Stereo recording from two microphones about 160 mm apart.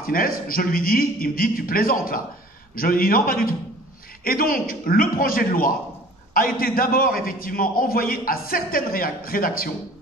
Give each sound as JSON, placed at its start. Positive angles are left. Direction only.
{"t": 0.0, "sound": "a man's voice", "side_deg": 65}